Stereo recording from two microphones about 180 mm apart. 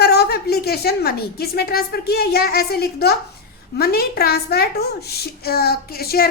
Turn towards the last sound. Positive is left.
turn(degrees=60)  # may be behind; listen again after turning